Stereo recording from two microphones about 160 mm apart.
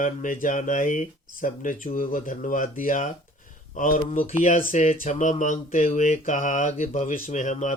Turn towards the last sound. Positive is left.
turn(degrees=50)  # may be behind; listen again after turning